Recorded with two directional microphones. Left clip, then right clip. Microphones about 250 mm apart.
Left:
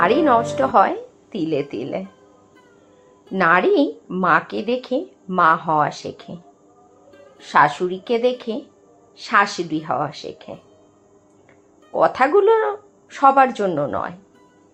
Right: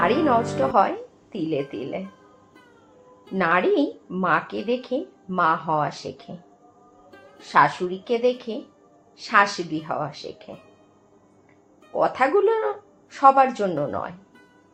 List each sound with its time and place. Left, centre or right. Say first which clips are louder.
0.0 s a woman's voice: left 4 dB; left
3.3 s a woman's voice: left 5 dB; left
7.4 s a woman's voice: left 3 dB; left
11.9 s a woman's voice: left 4 dB; left